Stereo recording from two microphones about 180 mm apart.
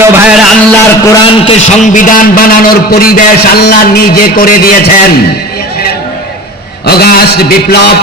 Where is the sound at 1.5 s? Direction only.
45° left (ahead or behind).